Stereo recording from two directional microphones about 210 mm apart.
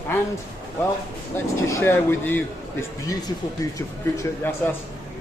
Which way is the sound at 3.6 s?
15° left (ahead or behind).